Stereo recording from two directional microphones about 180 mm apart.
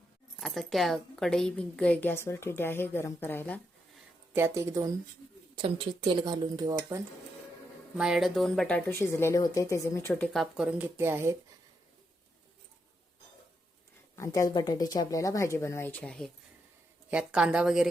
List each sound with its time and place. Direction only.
0.3 s a woman's voice: centre (ahead or behind)
4.4 s speech: 15° right (ahead or behind)
5.5 s speech: 30° right (ahead or behind)
7.9 s a woman's voice: 5° right (ahead or behind); by 10.2 s 15° left (ahead or behind)
10.3 s speech: centre (ahead or behind)
14.2 s a woman's voice: 20° left (ahead or behind)
17.1 s a woman's voice: 5° right (ahead or behind)